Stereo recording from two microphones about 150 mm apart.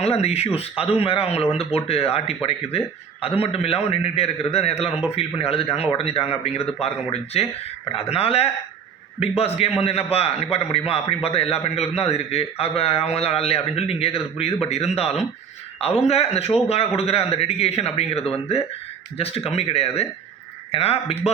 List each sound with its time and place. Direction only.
0.0 s a man's voice: 45° left (ahead or behind)